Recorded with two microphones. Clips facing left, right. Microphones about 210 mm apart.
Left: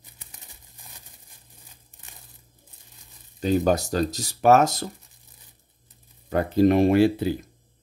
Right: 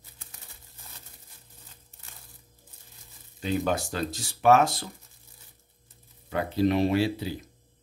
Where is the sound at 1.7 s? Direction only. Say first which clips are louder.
Left 1 dB; 15° left (ahead or behind).